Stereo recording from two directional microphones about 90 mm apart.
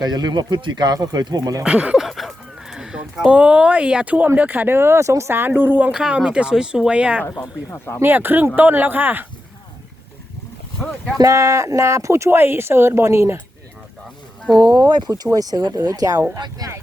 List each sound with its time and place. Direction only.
0.0 s speech: 50° right (ahead or behind)
1.6 s speech: 15° right (ahead or behind)
2.0 s a sound: centre (ahead or behind); by 4.3 s 15° right (ahead or behind)
4.4 s speech: 20° right (ahead or behind)
5.9 s speech: 10° right (ahead or behind)
7.9 s speech: 25° right (ahead or behind)
11.2 s speech: 40° right (ahead or behind)
14.5 s speech: 45° right (ahead or behind)